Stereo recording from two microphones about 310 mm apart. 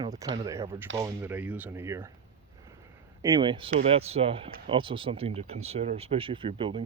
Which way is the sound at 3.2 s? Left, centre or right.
Centre.